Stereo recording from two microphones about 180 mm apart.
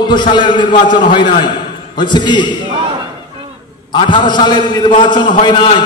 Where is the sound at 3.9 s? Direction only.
25° left (ahead or behind).